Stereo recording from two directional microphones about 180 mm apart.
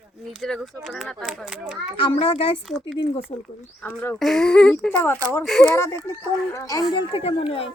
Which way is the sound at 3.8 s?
10° left (ahead or behind).